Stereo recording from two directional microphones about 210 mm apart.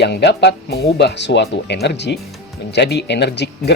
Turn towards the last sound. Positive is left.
turn(degrees=55)  # may be behind; listen again after turning